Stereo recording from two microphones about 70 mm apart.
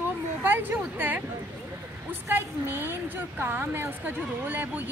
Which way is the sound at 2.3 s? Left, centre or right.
Right.